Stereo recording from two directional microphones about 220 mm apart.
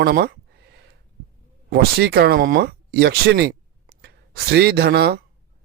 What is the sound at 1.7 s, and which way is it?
Speech, 45° right (ahead or behind).